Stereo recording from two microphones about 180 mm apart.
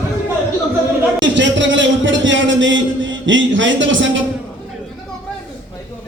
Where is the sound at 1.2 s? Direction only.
90° right.